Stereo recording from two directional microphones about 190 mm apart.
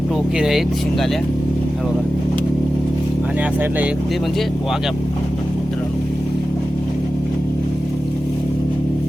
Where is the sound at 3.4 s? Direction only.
10° right (ahead or behind).